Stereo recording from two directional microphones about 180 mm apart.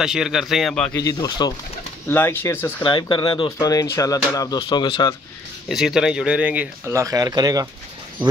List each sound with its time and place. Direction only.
0.0 s a man's voice: 5° right (ahead or behind)
0.9 s speech: 20° left (ahead or behind)
2.8 s speech: 25° left (ahead or behind)
5.7 s speech: centre (ahead or behind); by 7.6 s 20° right (ahead or behind)